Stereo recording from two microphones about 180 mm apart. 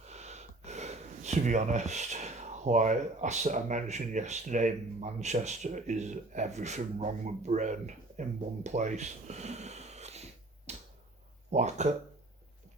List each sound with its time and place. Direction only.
0.1 s speech: 40° right (ahead or behind)
10.7 s finger snapping: 40° right (ahead or behind)
11.5 s speech: 40° right (ahead or behind)